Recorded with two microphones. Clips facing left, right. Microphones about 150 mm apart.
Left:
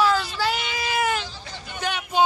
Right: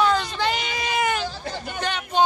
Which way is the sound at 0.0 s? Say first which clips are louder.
Even; 5° left (ahead or behind).